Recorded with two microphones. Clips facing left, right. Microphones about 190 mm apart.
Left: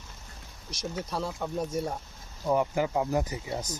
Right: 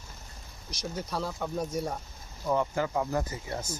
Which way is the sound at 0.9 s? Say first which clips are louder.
Even; centre (ahead or behind).